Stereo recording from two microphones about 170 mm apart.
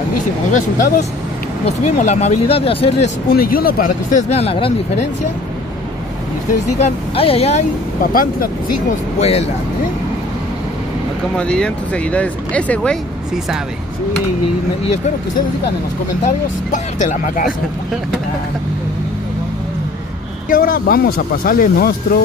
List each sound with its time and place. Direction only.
0.5 s speech: 50° left (ahead or behind)
3.3 s speech: 60° left (ahead or behind); by 4.7 s 35° left (ahead or behind)
6.8 s speech: 35° left (ahead or behind)
8.0 s speech: 55° left (ahead or behind)
9.2 s speech: 40° left (ahead or behind)
11.3 s speech: 5° left (ahead or behind)
16.3 s speech: 50° left (ahead or behind)
20.4 s speech: 60° left (ahead or behind)